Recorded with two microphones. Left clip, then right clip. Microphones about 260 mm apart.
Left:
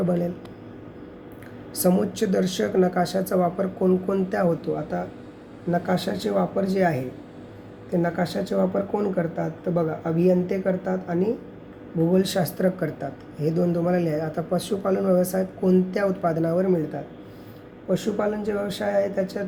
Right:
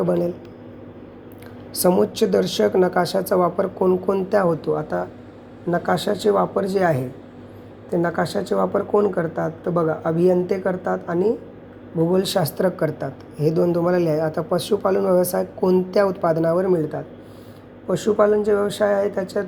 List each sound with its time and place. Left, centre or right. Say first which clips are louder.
1.7 s speech: right 5 dB; centre
17.9 s speech: right 8 dB; centre